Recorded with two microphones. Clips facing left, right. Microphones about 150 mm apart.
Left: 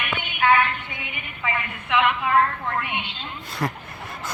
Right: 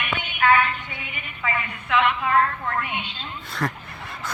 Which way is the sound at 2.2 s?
20° left (ahead or behind).